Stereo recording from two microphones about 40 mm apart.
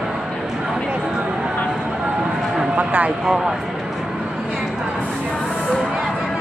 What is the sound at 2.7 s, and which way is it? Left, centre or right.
Speech, right.